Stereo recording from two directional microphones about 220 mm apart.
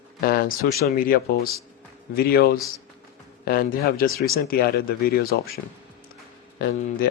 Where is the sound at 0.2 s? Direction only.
45° left (ahead or behind).